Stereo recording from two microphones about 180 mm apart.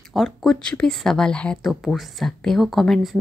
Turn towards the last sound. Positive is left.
turn(degrees=0)  # may be behind; listen again after turning